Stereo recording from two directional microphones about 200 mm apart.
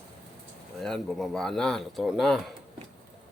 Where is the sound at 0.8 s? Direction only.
Centre (ahead or behind).